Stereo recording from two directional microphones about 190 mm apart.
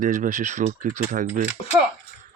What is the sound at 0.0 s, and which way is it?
Speech, 45° right (ahead or behind).